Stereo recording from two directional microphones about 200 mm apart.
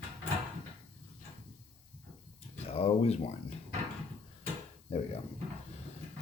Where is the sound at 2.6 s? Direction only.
30° left (ahead or behind).